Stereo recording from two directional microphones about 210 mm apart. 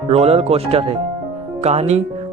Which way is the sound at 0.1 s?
30° right (ahead or behind).